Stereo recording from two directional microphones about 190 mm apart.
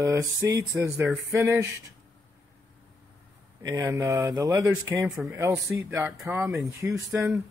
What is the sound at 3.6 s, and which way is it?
Speech, 15° right (ahead or behind).